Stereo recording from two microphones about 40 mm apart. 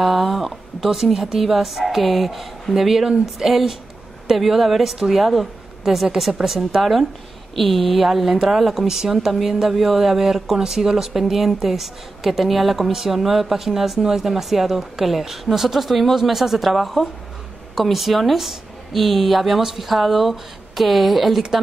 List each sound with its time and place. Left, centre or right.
0.0 s a woman's voice: centre